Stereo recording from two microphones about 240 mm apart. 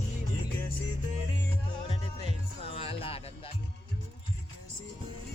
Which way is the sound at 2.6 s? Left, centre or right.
Left.